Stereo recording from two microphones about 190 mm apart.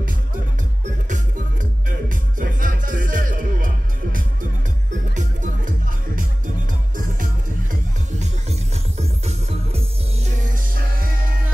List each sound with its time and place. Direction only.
1.0 s music: 40° right (ahead or behind)
8.2 s music: 35° right (ahead or behind)
10.7 s music: 50° right (ahead or behind)